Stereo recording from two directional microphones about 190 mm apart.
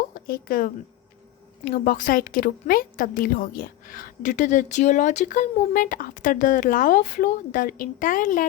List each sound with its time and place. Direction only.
0.1 s a woman's voice: 50° left (ahead or behind)